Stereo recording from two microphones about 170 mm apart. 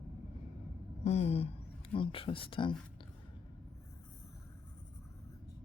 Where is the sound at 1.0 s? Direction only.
40° left (ahead or behind).